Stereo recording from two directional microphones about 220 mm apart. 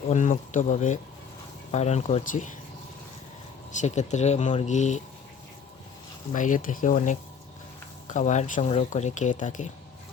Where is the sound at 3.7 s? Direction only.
30° left (ahead or behind).